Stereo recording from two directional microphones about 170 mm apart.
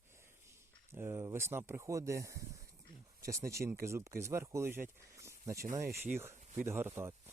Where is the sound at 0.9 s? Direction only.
15° right (ahead or behind).